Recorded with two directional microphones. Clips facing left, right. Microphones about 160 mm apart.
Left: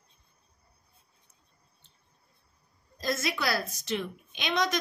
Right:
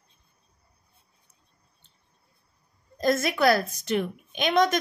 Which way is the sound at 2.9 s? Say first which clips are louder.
Right 7 dB; 55° right (ahead or behind).